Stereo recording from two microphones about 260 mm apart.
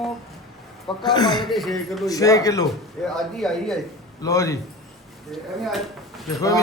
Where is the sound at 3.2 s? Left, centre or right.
Centre.